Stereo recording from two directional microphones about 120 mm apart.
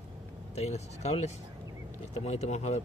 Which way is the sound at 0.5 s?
65° left (ahead or behind).